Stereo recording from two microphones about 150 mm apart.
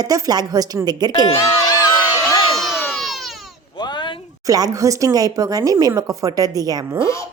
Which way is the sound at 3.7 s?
30° left (ahead or behind).